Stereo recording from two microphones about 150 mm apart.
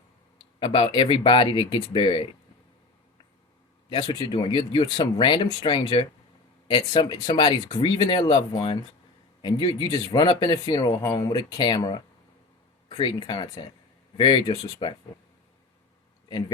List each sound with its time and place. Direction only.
0.6 s speech: 35° left (ahead or behind)
3.8 s speech: 30° left (ahead or behind)
16.3 s speech: 30° left (ahead or behind)